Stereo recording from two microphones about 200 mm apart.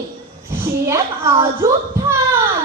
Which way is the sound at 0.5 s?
15° right (ahead or behind).